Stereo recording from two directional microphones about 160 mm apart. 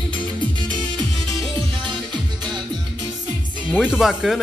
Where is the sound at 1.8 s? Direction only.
30° right (ahead or behind).